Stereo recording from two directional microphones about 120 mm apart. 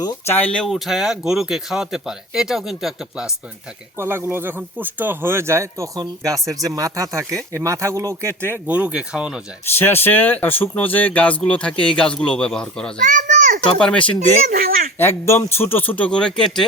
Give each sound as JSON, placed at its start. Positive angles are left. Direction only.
{"t": 0.3, "sound": "speech", "side_deg": 15}
{"t": 0.6, "sound": "speech", "side_deg": 0}
{"t": 3.9, "sound": "speech", "side_deg": -20}
{"t": 9.6, "sound": "speech", "side_deg": 20}
{"t": 13.1, "sound": "a child's voice", "side_deg": -90}
{"t": 13.7, "sound": "speech", "side_deg": 5}
{"t": 14.9, "sound": "speech", "side_deg": 20}